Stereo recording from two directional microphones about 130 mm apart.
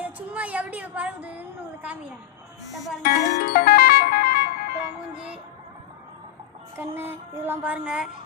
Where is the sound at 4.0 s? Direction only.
90° left.